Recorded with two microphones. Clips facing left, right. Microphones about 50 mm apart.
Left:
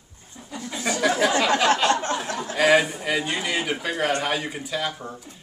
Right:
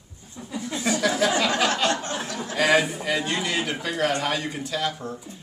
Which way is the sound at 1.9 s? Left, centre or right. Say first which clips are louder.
Left 3 dB; left.